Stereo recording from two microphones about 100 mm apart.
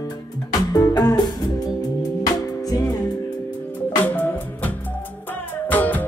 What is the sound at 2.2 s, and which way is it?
Music, 40° left (ahead or behind).